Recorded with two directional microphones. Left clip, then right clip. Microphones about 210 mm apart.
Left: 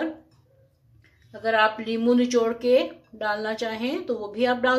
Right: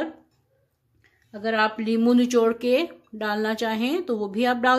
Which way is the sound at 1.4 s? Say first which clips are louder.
Left 2 dB; 45° right (ahead or behind).